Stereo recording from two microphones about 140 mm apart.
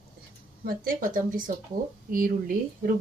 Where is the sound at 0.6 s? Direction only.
90° right.